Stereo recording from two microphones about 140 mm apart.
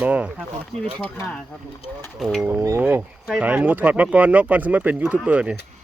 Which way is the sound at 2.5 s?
15° right (ahead or behind).